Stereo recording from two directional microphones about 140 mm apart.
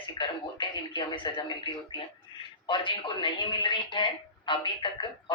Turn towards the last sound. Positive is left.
turn(degrees=35)  # may be behind; listen again after turning